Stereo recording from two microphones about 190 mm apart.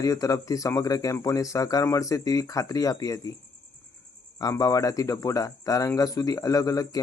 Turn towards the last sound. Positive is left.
turn(degrees=20)  # may be behind; listen again after turning